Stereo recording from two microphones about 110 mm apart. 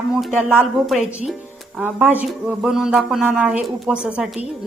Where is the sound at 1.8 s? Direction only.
15° right (ahead or behind).